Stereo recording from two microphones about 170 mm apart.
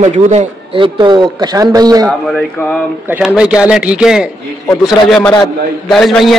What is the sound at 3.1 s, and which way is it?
A man's voice, 5° right (ahead or behind).